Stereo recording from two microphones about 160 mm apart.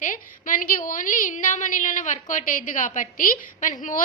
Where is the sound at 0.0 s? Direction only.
55° left (ahead or behind).